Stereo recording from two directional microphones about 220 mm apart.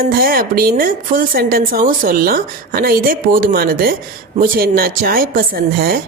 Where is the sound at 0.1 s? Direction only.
40° right (ahead or behind).